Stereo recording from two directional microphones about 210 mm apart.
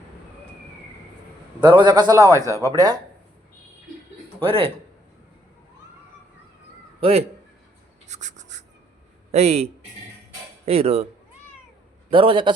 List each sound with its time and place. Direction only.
1.6 s a man's voice: 20° right (ahead or behind)
4.4 s speech: 25° right (ahead or behind)
7.0 s speech: 30° right (ahead or behind)
8.0 s a sound: 35° right (ahead or behind)
9.3 s a man's voice: 30° right (ahead or behind)
12.1 s a man's voice: 25° right (ahead or behind)